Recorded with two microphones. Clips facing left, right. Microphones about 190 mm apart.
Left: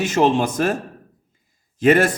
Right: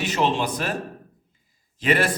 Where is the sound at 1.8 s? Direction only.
45° left (ahead or behind).